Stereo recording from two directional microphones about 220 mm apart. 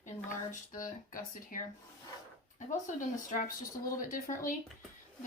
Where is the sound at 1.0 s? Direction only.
35° left (ahead or behind).